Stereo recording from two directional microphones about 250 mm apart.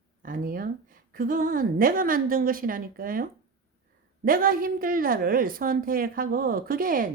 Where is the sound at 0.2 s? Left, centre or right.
Right.